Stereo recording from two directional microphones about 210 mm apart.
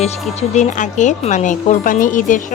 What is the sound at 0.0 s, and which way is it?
Speech, 35° left (ahead or behind).